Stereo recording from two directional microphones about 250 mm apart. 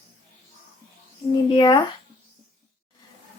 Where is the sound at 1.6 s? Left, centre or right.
Centre.